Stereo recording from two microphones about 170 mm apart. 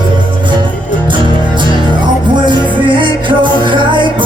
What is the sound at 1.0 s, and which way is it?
Music, 30° right (ahead or behind).